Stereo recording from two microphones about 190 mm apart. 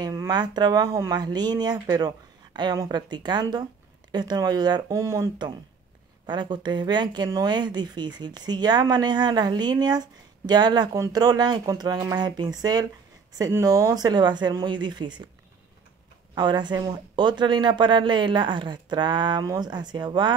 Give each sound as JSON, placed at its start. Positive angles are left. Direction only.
{"t": 0.0, "sound": "speech", "side_deg": -20}
{"t": 16.3, "sound": "speech", "side_deg": -25}